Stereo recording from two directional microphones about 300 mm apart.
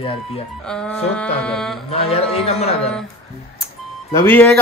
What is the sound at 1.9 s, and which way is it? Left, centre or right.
Speech, centre.